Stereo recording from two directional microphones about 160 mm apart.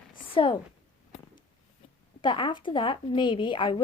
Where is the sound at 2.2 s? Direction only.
30° left (ahead or behind).